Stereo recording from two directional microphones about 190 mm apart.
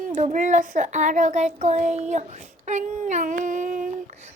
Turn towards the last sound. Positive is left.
turn(degrees=-45)  # may be behind; listen again after turning